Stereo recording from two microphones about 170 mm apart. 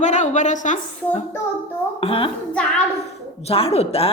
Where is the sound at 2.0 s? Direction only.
35° left (ahead or behind).